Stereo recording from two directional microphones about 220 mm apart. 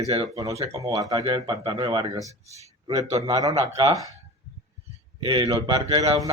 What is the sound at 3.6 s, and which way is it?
Speech, 25° right (ahead or behind).